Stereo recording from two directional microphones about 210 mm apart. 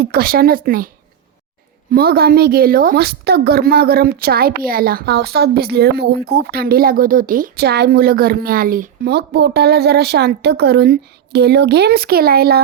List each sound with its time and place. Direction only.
0.0 s a woman's voice: 45° right (ahead or behind)
1.9 s a woman's voice: 45° right (ahead or behind)